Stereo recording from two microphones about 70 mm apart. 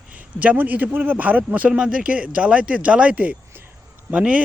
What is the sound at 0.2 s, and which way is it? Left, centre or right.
A man's voice, right.